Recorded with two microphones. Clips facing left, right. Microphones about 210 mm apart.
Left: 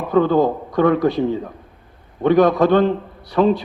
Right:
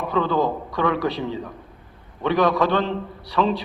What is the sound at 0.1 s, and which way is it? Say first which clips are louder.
A man's voice: left 7 dB; 50° left (ahead or behind).